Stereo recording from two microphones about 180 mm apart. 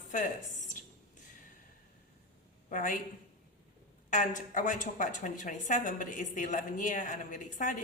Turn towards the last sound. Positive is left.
turn(degrees=45)  # may be behind; listen again after turning